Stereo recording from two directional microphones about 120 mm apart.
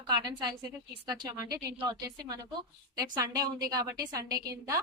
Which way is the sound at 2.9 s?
30° right (ahead or behind).